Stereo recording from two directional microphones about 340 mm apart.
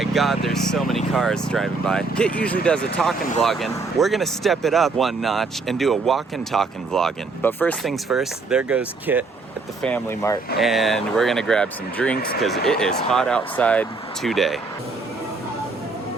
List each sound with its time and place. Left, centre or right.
0.0 s speech: centre
12.1 s speech: left
12.6 s speech: centre